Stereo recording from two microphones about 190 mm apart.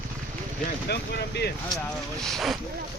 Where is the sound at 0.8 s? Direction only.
60° left (ahead or behind).